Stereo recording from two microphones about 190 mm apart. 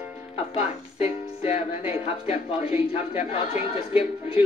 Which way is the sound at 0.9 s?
35° left (ahead or behind).